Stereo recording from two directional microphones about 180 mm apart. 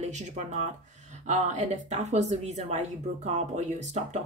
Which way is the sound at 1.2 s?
40° right (ahead or behind).